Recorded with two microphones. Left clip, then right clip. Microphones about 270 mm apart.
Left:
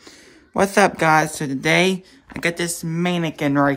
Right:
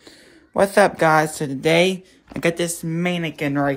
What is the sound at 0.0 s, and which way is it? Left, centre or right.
Speech, centre.